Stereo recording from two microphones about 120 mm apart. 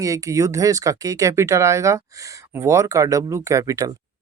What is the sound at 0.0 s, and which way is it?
Speech, 30° right (ahead or behind).